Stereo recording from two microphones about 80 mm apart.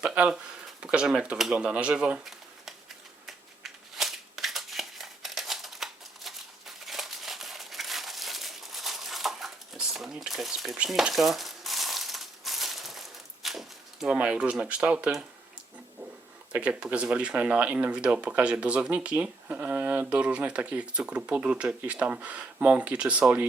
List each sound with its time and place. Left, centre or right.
0.0 s speech: centre
3.2 s a sound: centre
11.1 s crumpling: centre
14.1 s speech: centre
16.5 s speech: centre